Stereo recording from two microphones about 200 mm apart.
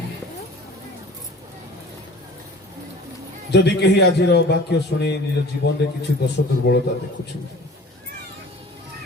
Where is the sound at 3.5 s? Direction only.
60° left (ahead or behind).